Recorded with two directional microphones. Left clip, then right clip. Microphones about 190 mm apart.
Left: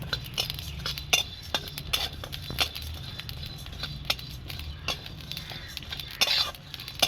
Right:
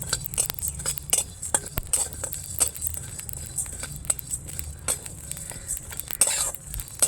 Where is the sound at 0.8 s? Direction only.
30° right (ahead or behind).